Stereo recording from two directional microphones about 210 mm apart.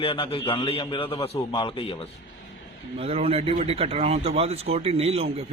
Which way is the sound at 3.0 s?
30° right (ahead or behind).